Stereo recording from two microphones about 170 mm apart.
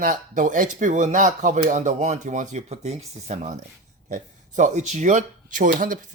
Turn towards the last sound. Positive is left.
turn(degrees=-50)  # may be behind; listen again after turning